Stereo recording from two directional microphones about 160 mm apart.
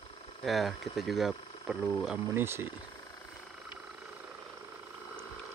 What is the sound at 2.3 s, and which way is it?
Speech, 15° right (ahead or behind).